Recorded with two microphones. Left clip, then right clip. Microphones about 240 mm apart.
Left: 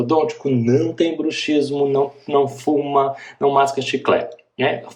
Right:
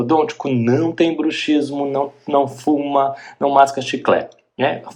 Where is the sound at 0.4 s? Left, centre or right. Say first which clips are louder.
Even; centre.